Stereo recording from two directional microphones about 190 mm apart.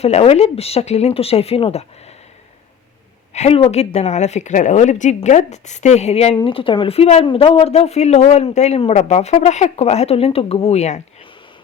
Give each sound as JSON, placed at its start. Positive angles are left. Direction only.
{"t": 0.0, "sound": "speech", "side_deg": 35}
{"t": 3.3, "sound": "speech", "side_deg": 35}